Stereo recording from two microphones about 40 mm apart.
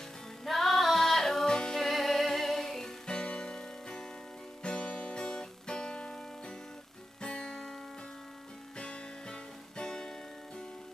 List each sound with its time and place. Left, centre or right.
0.5 s music: centre
4.6 s music: left
7.2 s music: centre
8.7 s music: left